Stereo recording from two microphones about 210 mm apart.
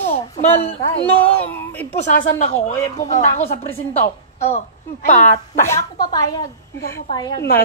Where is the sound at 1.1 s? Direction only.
10° left (ahead or behind).